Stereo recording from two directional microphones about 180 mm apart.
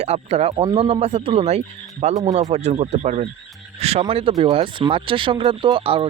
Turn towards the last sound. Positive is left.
turn(degrees=-30)  # may be behind; listen again after turning